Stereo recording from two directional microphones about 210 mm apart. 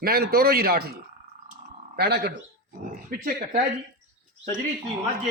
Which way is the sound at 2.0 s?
50° right (ahead or behind).